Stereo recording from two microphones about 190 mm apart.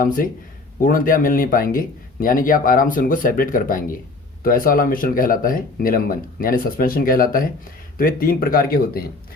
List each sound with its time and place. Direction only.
0.8 s speech: 45° left (ahead or behind)